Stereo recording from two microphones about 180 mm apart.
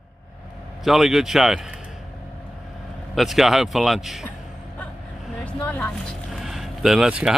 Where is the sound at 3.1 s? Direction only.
Centre (ahead or behind).